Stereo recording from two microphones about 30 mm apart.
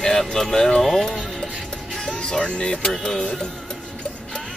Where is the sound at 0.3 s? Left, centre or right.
Centre.